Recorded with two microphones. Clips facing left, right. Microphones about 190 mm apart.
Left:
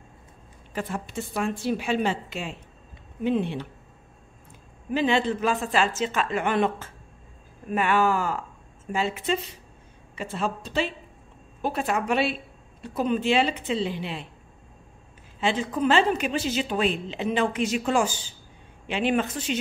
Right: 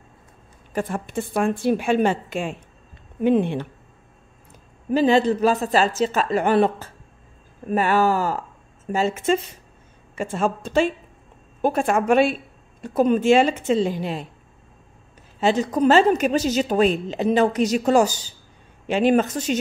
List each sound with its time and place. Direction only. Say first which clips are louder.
0.7 s a woman's voice: right 5 dB; 50° right (ahead or behind)
4.9 s a woman's voice: right 6 dB; 40° right (ahead or behind)
15.4 s a woman's voice: right 6 dB; 40° right (ahead or behind)